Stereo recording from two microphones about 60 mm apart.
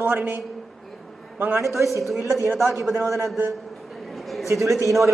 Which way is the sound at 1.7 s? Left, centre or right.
Right.